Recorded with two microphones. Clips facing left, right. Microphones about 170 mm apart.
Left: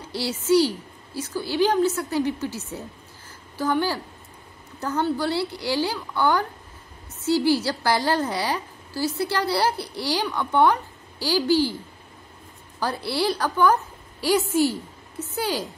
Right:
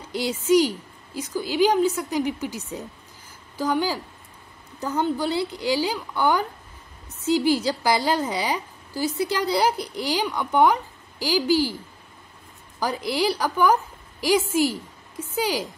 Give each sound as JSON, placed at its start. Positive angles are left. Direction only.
{"t": 0.1, "sound": "a woman's voice", "side_deg": -15}
{"t": 12.8, "sound": "a woman's voice", "side_deg": -15}